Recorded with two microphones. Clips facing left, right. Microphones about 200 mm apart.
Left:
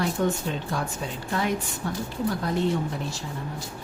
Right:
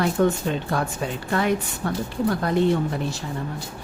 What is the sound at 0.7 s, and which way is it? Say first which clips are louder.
Speech: right 4 dB; 60° right (ahead or behind).